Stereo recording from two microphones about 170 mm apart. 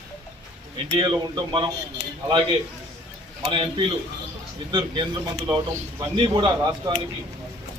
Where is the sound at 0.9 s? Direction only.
30° right (ahead or behind).